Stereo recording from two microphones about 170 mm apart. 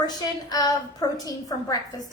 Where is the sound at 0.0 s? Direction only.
25° left (ahead or behind).